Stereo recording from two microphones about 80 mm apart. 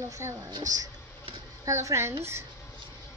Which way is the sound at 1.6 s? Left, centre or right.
Right.